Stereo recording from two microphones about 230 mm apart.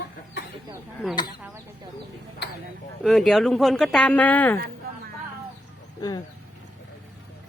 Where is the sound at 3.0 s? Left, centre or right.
Centre.